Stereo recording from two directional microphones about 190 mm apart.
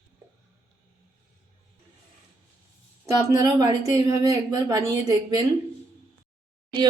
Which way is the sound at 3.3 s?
20° right (ahead or behind).